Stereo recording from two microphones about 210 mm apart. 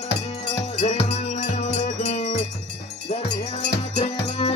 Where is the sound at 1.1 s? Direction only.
35° left (ahead or behind).